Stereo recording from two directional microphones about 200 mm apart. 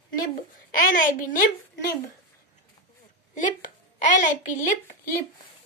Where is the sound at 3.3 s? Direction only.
40° left (ahead or behind).